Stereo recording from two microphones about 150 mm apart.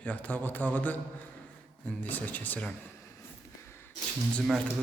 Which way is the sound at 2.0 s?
10° left (ahead or behind).